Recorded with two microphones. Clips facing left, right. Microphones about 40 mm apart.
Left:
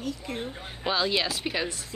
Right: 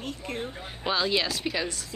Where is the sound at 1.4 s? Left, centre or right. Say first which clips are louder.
Even; centre.